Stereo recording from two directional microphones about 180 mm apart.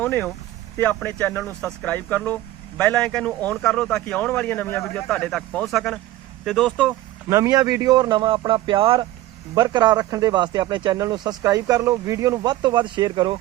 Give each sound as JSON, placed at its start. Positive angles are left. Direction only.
{"t": 0.0, "sound": "speech", "side_deg": 10}
{"t": 7.3, "sound": "speech", "side_deg": -15}